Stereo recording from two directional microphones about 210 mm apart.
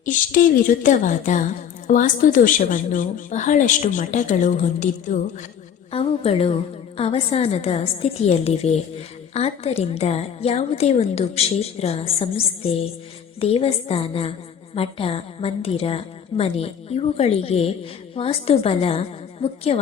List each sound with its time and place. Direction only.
0.0 s a woman's voice: 40° left (ahead or behind)